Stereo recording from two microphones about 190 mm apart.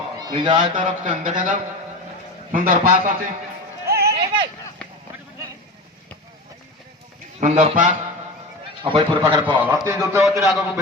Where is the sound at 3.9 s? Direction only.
55° right (ahead or behind).